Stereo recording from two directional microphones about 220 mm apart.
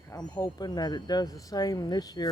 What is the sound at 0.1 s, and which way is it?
Speech, 15° left (ahead or behind).